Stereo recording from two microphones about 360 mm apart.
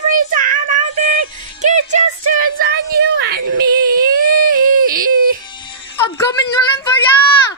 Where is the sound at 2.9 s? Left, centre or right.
Right.